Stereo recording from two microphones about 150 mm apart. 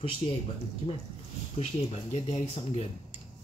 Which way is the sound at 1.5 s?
40° left (ahead or behind).